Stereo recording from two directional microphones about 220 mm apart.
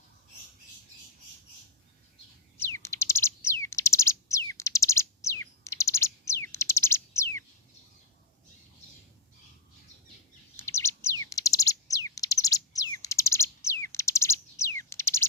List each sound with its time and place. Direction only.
2.6 s bird: 10° left (ahead or behind)
10.6 s bird: 10° left (ahead or behind)